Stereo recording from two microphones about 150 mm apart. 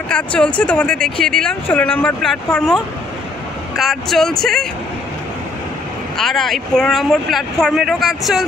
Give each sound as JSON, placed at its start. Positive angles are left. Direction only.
{"t": 0.1, "sound": "speech", "side_deg": 5}
{"t": 6.1, "sound": "speech", "side_deg": 0}